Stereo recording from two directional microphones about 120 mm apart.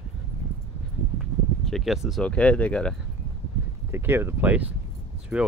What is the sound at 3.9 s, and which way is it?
Speech, 20° right (ahead or behind).